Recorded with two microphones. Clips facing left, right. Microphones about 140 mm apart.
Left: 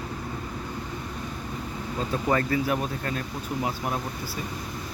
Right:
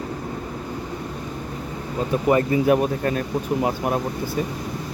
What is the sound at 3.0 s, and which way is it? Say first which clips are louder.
Speech: right 8 dB; 35° right (ahead or behind).